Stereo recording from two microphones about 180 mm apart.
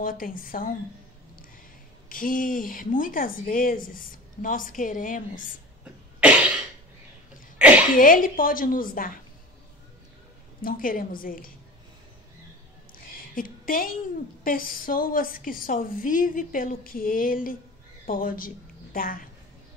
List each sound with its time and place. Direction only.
0.0 s a woman's voice: 50° left (ahead or behind)
2.0 s a woman's voice: 50° left (ahead or behind)
7.5 s sneeze: 5° right (ahead or behind)
8.0 s a woman's voice: 50° left (ahead or behind)
10.6 s a woman's voice: 50° left (ahead or behind)
12.9 s a sound: 50° left (ahead or behind)
14.4 s a woman's voice: 50° left (ahead or behind)